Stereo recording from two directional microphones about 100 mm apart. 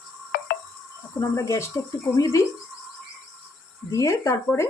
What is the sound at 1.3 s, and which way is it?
Frying, 30° left (ahead or behind).